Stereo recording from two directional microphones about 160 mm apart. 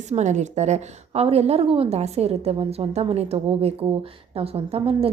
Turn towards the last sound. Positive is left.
turn(degrees=-40)  # may be behind; listen again after turning